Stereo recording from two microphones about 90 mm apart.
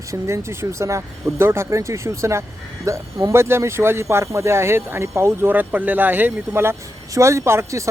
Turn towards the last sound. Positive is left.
turn(degrees=-30)  # may be behind; listen again after turning